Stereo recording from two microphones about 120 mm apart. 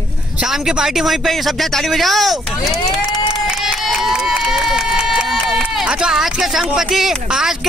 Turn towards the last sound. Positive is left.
turn(degrees=-5)  # may be behind; listen again after turning